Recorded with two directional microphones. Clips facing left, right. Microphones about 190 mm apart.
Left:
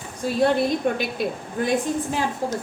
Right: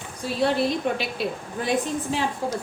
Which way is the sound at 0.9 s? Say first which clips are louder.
Left 2 dB; 50° left (ahead or behind).